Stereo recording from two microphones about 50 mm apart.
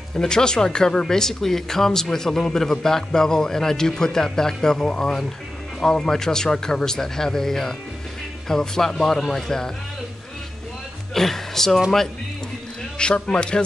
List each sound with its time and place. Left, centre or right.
0.1 s speech: centre
11.1 s speech: centre
12.9 s speech: centre